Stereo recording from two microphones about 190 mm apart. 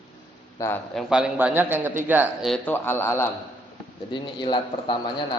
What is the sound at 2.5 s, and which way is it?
Speech, 10° left (ahead or behind).